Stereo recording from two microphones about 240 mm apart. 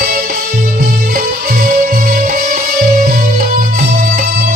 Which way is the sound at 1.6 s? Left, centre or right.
Right.